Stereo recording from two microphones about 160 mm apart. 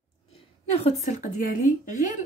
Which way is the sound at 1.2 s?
55° left (ahead or behind).